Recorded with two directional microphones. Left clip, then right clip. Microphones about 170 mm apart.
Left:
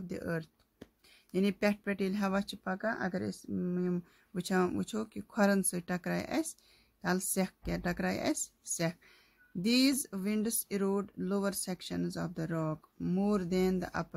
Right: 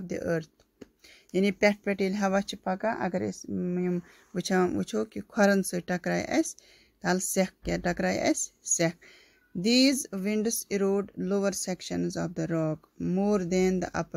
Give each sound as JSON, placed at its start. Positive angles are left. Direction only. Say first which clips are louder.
{"t": 0.0, "sound": "speech", "louder": "right 8 dB", "side_deg": -15}
{"t": 3.5, "sound": "speech", "louder": "right 3 dB", "side_deg": -5}
{"t": 3.8, "sound": "speech", "louder": "right 5 dB", "side_deg": -15}